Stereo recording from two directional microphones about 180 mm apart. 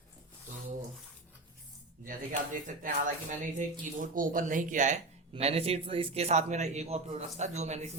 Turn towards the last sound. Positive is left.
turn(degrees=-40)  # may be behind; listen again after turning